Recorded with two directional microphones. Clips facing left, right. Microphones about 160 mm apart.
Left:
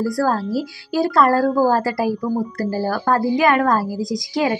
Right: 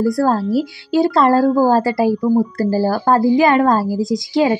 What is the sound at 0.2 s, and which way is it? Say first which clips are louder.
A woman's voice: right 4 dB; 25° right (ahead or behind).